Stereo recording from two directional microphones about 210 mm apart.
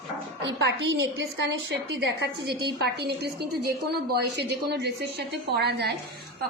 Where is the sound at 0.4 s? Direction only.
55° right (ahead or behind).